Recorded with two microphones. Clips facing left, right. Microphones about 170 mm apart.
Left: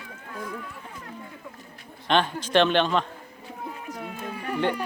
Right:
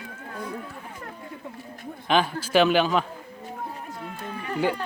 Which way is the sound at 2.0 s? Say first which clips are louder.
Even; 5° right (ahead or behind).